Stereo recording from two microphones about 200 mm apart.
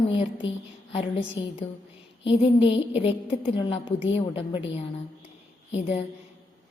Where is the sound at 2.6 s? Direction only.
25° left (ahead or behind).